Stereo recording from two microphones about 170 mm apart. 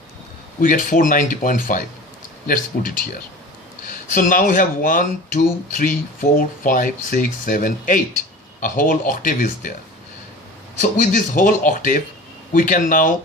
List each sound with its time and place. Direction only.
0.6 s speech: 50° left (ahead or behind)
4.1 s speech: 50° left (ahead or behind)
10.8 s speech: 50° left (ahead or behind)